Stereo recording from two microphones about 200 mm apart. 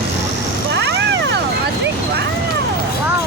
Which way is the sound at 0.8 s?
60° right (ahead or behind).